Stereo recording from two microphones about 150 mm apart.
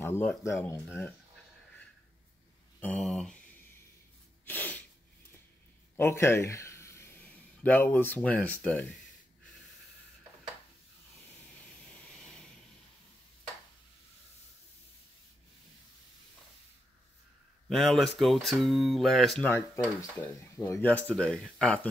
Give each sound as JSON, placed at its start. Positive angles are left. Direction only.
{"t": 0.0, "sound": "speech", "side_deg": 15}
{"t": 2.8, "sound": "speech", "side_deg": 5}
{"t": 4.5, "sound": "sneeze", "side_deg": 10}
{"t": 5.9, "sound": "speech", "side_deg": 15}
{"t": 17.6, "sound": "speech", "side_deg": 0}
{"t": 19.5, "sound": "speech", "side_deg": 15}